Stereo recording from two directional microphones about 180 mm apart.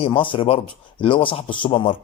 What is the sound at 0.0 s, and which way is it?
A man's voice, 30° left (ahead or behind).